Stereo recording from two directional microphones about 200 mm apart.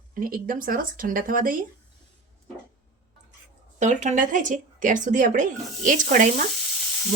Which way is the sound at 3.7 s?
35° right (ahead or behind).